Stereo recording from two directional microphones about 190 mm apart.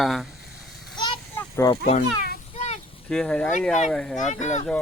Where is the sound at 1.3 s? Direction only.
15° left (ahead or behind).